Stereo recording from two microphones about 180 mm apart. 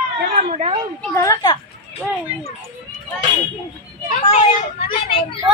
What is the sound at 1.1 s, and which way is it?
Speech, 20° left (ahead or behind).